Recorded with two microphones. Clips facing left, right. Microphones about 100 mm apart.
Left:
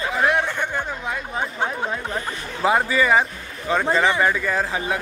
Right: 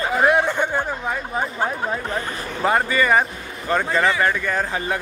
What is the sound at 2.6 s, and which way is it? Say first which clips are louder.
Speech: even; 5° left (ahead or behind).